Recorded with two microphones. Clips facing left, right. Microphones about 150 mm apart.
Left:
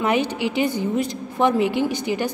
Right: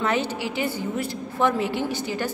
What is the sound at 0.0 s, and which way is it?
A woman's voice, 15° left (ahead or behind).